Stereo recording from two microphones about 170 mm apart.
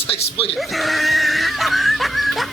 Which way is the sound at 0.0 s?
35° left (ahead or behind).